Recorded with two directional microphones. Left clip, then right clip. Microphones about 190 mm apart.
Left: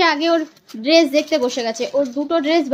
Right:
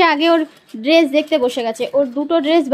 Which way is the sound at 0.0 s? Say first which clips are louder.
Right 3 dB; 20° right (ahead or behind).